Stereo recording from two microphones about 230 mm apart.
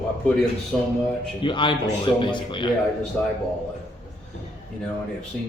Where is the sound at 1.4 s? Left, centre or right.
Left.